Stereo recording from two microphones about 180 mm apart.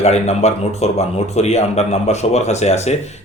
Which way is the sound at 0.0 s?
35° left (ahead or behind).